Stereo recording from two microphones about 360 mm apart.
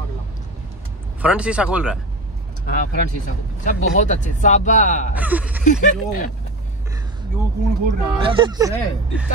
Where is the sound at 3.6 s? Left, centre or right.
Left.